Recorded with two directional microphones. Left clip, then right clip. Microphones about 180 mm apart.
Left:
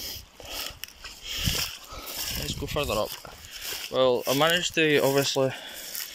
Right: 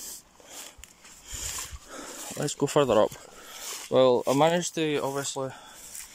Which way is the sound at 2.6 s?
45° right (ahead or behind).